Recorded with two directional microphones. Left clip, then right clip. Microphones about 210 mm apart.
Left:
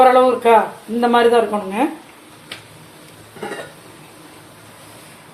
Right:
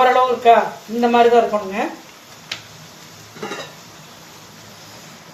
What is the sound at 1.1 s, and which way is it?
Speech, 35° left (ahead or behind).